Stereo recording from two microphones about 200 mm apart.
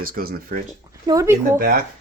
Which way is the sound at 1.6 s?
45° right (ahead or behind).